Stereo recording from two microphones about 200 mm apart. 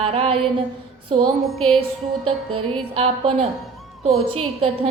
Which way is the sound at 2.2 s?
90° right.